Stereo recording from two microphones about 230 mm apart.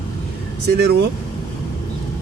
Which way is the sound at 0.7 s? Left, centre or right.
Right.